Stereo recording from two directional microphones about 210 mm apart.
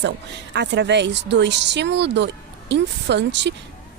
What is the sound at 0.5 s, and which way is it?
Speech, 55° right (ahead or behind).